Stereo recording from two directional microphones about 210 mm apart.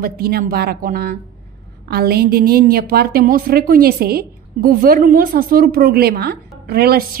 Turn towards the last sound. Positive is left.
turn(degrees=-45)  # may be behind; listen again after turning